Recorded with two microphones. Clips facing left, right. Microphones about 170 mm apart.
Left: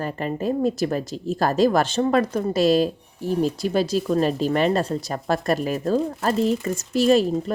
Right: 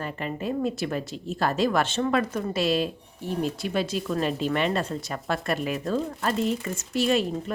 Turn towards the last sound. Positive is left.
turn(degrees=35)  # may be behind; listen again after turning